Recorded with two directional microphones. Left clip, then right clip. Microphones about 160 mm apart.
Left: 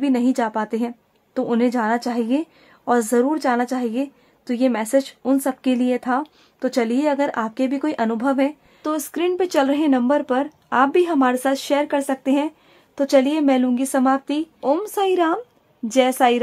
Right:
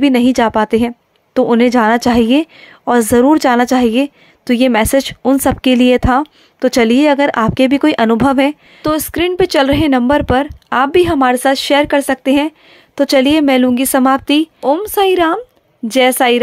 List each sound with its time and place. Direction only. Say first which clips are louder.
0.0 s speech: right 9 dB; 30° right (ahead or behind)
14.6 s a woman's voice: right 7 dB; 25° right (ahead or behind)